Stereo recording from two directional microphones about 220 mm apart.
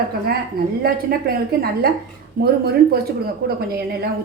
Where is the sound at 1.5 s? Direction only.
45° right (ahead or behind).